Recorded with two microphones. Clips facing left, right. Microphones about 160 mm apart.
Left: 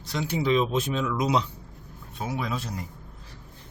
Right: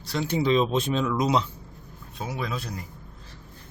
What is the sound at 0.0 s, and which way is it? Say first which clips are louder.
Speech: right 2 dB; 15° left (ahead or behind).